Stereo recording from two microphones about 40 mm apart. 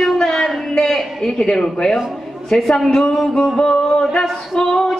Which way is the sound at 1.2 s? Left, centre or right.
Centre.